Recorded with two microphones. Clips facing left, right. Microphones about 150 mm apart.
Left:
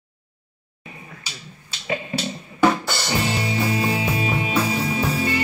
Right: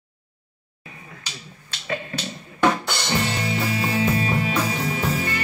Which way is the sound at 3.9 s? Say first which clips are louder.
Right 2 dB; 15° left (ahead or behind).